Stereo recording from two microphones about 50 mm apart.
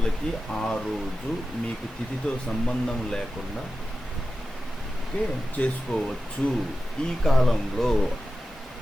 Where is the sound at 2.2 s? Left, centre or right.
Centre.